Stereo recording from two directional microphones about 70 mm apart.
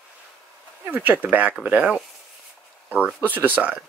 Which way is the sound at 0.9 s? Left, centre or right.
Right.